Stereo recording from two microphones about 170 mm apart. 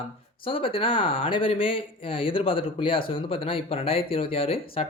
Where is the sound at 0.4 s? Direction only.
30° left (ahead or behind).